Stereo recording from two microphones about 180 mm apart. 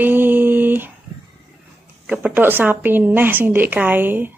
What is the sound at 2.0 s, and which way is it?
A woman's voice, 10° right (ahead or behind).